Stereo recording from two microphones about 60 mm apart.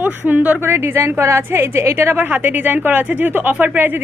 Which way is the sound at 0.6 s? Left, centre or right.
Right.